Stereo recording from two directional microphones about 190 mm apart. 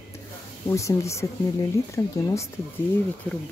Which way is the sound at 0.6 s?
15° left (ahead or behind).